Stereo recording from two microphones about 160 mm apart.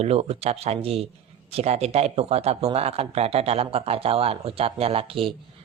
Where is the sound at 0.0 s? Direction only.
40° right (ahead or behind).